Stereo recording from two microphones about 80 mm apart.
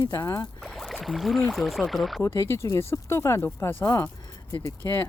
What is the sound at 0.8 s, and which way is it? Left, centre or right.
Speech, centre.